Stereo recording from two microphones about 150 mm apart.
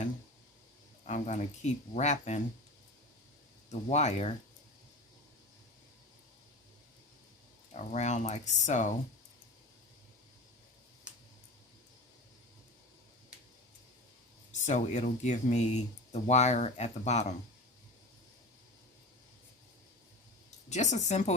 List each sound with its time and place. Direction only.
1.0 s speech: 50° left (ahead or behind)
3.7 s speech: 45° left (ahead or behind)
7.7 s speech: 50° left (ahead or behind)
11.1 s a sound: 10° right (ahead or behind)
14.6 s speech: 50° left (ahead or behind)
20.7 s speech: 50° left (ahead or behind)